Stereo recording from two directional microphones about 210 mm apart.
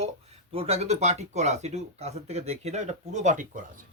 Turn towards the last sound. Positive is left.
turn(degrees=-40)  # may be behind; listen again after turning